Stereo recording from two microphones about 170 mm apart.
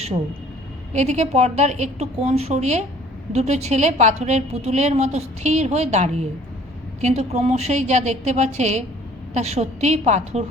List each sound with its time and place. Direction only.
0.9 s a woman's voice: 40° right (ahead or behind)